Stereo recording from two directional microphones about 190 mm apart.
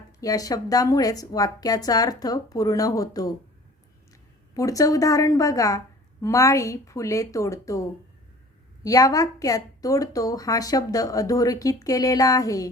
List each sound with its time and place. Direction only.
0.2 s a woman's voice: 20° left (ahead or behind)
4.5 s a woman's voice: 15° left (ahead or behind)